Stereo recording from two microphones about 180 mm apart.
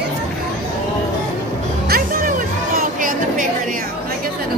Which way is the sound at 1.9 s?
50° right (ahead or behind).